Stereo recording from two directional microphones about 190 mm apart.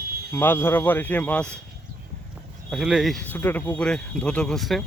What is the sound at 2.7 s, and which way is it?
Speech, centre (ahead or behind).